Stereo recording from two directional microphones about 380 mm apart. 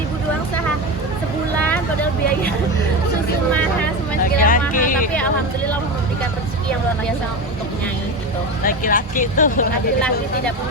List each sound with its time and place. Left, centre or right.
4.2 s vehicle: left
4.7 s a sound: left
8.6 s speech: left